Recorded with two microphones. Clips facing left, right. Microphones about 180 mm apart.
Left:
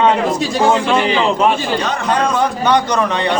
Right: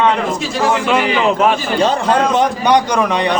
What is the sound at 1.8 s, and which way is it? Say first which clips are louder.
Speech: right 5 dB; 30° right (ahead or behind).